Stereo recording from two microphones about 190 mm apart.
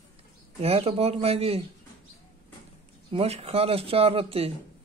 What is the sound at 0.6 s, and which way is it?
Speech, 30° right (ahead or behind).